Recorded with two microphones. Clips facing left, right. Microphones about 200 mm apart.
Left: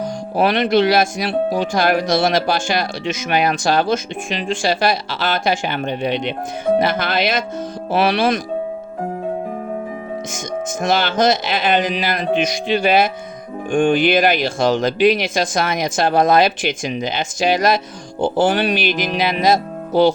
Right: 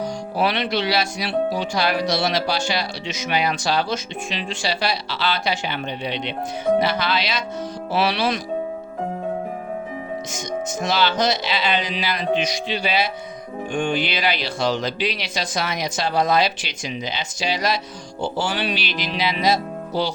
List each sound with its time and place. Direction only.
0.0 s speech: 50° left (ahead or behind)
10.3 s speech: 50° left (ahead or behind)